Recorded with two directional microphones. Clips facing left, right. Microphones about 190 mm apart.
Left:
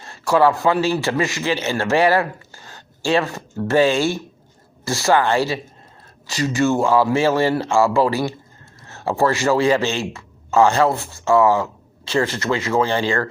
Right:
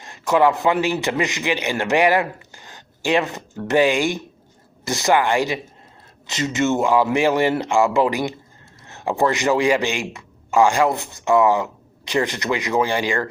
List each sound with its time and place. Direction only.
0.0 s a man's voice: 15° right (ahead or behind)